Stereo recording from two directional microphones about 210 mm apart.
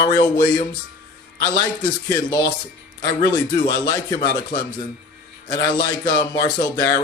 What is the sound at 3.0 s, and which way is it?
A man's voice, 20° left (ahead or behind).